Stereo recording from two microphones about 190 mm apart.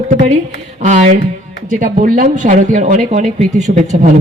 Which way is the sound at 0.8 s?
40° right (ahead or behind).